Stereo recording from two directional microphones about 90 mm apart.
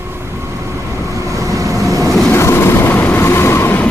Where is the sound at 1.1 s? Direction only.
35° right (ahead or behind).